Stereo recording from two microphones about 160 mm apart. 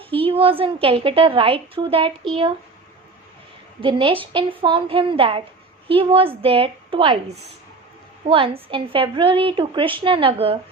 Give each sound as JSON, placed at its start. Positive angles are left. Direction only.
{"t": 0.0, "sound": "a woman's voice", "side_deg": -35}
{"t": 3.8, "sound": "a woman's voice", "side_deg": -35}
{"t": 8.2, "sound": "a woman's voice", "side_deg": -35}